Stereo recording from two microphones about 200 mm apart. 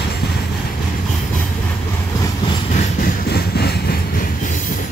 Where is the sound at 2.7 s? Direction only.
50° left (ahead or behind).